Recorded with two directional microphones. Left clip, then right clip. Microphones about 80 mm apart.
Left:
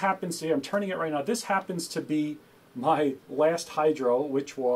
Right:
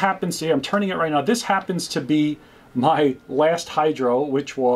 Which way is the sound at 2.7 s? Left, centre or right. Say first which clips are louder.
Right 7 dB; centre.